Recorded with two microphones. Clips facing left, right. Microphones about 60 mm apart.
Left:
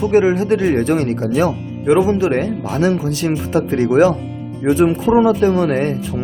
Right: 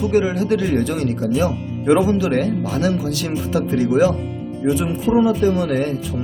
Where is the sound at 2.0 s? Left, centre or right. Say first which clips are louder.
Left 2 dB; left.